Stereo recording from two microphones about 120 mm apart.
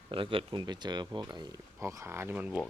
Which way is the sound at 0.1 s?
45° right (ahead or behind).